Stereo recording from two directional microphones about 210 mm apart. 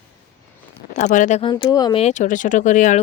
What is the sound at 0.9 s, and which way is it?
Speech, 35° left (ahead or behind).